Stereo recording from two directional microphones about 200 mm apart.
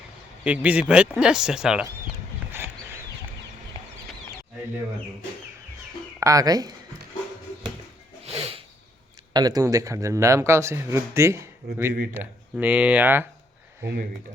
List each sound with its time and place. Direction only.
0.4 s speech: 5° right (ahead or behind)
6.1 s a man's voice: 15° right (ahead or behind)
8.2 s music: 30° right (ahead or behind)
9.3 s a man's voice: 20° right (ahead or behind)